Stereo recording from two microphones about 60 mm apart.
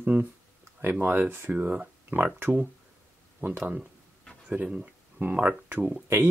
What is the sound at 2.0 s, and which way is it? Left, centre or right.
Speech, right.